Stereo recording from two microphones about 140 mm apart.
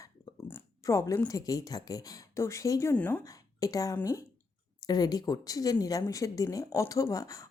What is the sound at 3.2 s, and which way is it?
A woman's voice, 25° left (ahead or behind).